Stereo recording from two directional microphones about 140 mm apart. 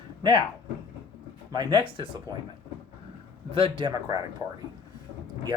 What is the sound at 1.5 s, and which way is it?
Speech, 30° right (ahead or behind).